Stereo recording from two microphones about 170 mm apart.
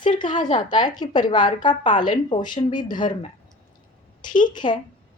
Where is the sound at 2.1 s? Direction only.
25° left (ahead or behind).